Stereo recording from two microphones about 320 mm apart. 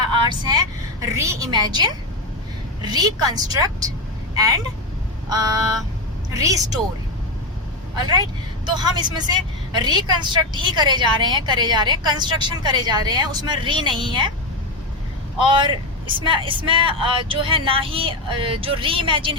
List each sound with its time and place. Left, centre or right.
0.3 s a woman's voice: centre
8.7 s a woman's voice: centre
15.4 s a woman's voice: centre